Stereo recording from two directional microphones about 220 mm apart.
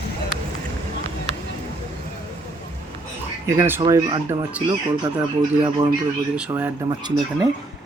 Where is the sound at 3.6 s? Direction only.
10° right (ahead or behind).